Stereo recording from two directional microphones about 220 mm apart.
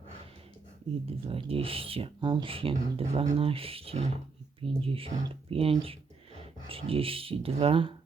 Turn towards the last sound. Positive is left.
turn(degrees=-25)  # may be behind; listen again after turning